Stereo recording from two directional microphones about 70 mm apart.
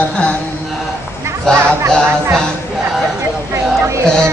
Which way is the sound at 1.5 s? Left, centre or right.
Right.